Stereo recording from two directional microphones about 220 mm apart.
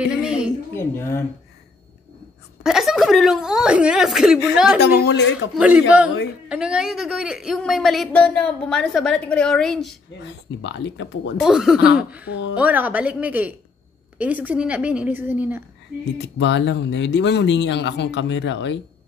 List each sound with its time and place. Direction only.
0.0 s a sound: 5° right (ahead or behind)
0.7 s speech: 10° left (ahead or behind)
2.6 s speech: centre (ahead or behind)
4.7 s speech: 45° left (ahead or behind)
5.6 s a woman's voice: 5° right (ahead or behind)
10.6 s speech: 55° left (ahead or behind)
11.4 s a woman's voice: centre (ahead or behind)
12.3 s speech: 55° left (ahead or behind)
12.5 s a woman's voice: 5° right (ahead or behind)
16.2 s speech: 55° left (ahead or behind)